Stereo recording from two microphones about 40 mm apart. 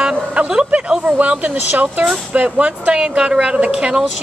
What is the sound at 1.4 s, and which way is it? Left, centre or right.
Speech, right.